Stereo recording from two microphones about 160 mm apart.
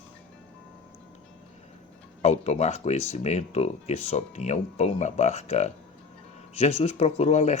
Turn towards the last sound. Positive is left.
turn(degrees=45)  # may be behind; listen again after turning